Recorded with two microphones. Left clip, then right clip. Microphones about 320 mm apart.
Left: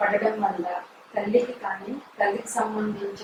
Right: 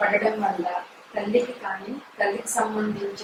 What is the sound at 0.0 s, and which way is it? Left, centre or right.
A woman's voice, centre.